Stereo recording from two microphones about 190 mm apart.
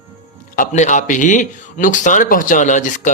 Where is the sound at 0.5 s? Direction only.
40° left (ahead or behind).